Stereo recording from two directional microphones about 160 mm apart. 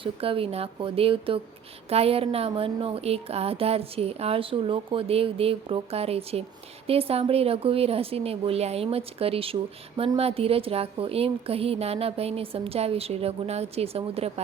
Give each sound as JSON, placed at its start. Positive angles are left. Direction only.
{"t": 0.0, "sound": "speech", "side_deg": -35}